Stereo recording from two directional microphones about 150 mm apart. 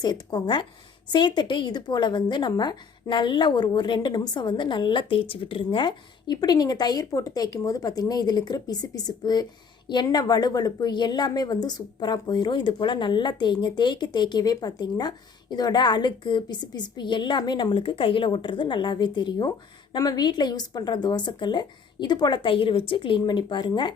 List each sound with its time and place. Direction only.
0.0 s a woman's voice: 25° left (ahead or behind)